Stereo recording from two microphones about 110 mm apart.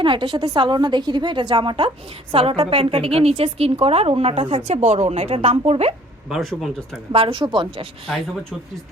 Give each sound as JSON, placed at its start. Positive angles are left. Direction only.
{"t": 0.0, "sound": "a woman's voice", "side_deg": -50}
{"t": 6.2, "sound": "speech", "side_deg": 0}
{"t": 7.1, "sound": "a woman's voice", "side_deg": -55}
{"t": 8.0, "sound": "speech", "side_deg": 0}